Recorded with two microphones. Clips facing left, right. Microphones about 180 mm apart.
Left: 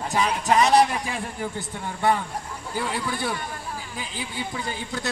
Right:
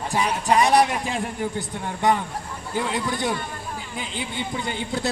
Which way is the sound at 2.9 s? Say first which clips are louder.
Right 3 dB; 20° right (ahead or behind).